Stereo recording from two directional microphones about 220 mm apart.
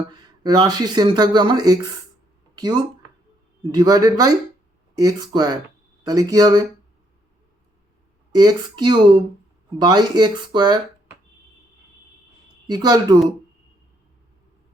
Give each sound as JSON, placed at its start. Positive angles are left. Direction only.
{"t": 0.1, "sound": "speech", "side_deg": -20}
{"t": 8.3, "sound": "speech", "side_deg": -20}
{"t": 12.6, "sound": "speech", "side_deg": -20}